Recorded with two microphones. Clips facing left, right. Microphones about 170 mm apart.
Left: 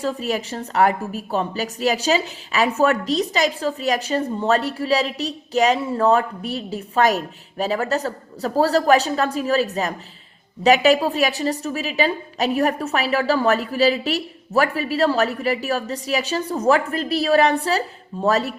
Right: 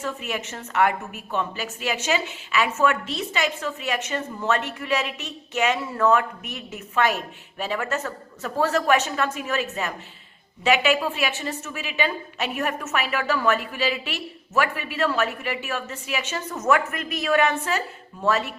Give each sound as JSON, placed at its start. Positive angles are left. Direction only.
{"t": 0.0, "sound": "a woman's voice", "side_deg": 35}